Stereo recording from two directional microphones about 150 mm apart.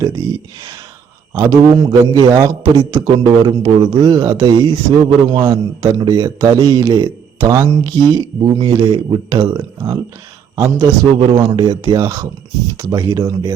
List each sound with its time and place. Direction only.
0.0 s speech: 25° right (ahead or behind)
5.4 s a man's voice: 15° right (ahead or behind)
5.9 s a man's voice: 25° right (ahead or behind)